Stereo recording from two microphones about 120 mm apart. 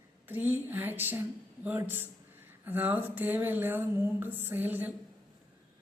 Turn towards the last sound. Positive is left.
turn(degrees=-15)  # may be behind; listen again after turning